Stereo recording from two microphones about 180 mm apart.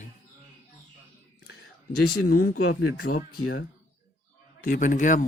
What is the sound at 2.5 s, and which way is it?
Speech, 55° left (ahead or behind).